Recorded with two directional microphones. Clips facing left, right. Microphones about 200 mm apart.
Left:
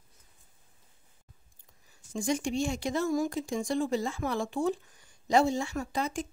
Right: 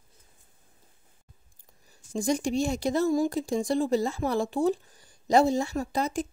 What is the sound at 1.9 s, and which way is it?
Speech, 40° right (ahead or behind).